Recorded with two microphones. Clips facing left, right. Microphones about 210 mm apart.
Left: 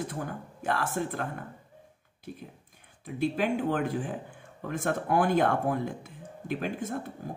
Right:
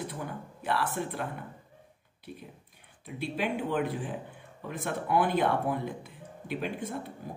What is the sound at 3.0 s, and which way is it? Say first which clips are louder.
Speech: left 4 dB; 45° left (ahead or behind).